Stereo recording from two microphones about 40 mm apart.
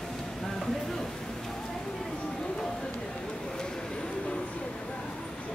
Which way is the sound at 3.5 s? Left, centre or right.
Centre.